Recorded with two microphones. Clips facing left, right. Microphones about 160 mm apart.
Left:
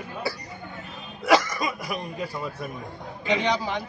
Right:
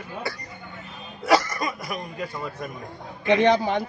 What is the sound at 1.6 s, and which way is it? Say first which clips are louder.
A man's voice: even; 5° left (ahead or behind).